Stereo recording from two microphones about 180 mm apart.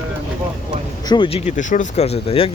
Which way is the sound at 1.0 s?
25° left (ahead or behind).